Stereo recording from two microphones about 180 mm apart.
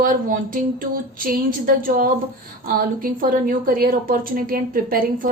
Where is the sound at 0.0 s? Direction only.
50° right (ahead or behind).